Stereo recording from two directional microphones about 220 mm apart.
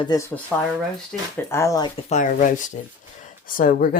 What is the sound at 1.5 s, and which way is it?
Speech, 10° left (ahead or behind).